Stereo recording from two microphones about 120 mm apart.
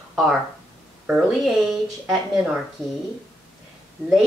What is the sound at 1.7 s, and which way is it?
Speech, centre (ahead or behind).